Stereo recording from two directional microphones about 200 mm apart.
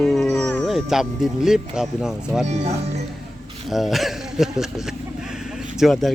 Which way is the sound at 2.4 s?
35° right (ahead or behind).